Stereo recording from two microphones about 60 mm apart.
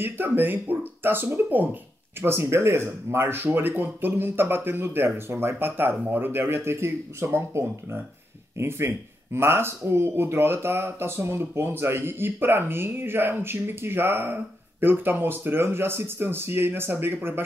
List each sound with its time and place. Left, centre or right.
0.0 s speech: right
2.2 s speech: right
3.5 s speech: right